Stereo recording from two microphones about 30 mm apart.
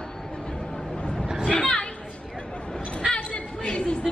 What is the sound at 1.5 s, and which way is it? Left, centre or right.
Chatter, left.